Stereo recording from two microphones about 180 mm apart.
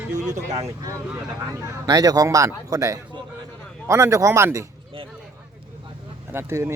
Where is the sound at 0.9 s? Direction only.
15° right (ahead or behind).